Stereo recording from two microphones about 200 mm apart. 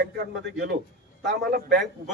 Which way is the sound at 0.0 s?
55° right (ahead or behind).